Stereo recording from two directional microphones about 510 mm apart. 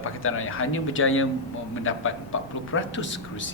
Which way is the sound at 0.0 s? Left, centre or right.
Left.